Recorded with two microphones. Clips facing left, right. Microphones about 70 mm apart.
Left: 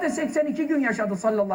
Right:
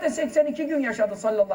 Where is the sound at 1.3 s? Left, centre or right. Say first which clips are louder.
Right 1 dB; left.